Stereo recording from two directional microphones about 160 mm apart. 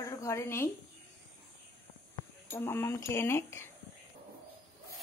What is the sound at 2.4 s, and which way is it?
Speech, 15° left (ahead or behind).